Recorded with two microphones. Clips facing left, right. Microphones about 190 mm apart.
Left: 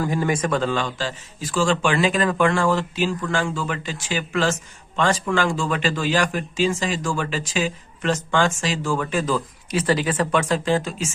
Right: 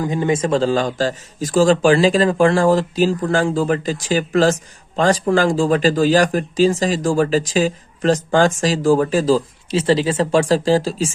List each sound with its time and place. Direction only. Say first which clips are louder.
0.0 s speech: right 4 dB; 20° right (ahead or behind)